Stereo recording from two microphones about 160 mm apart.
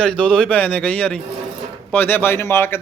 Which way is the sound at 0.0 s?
5° left (ahead or behind).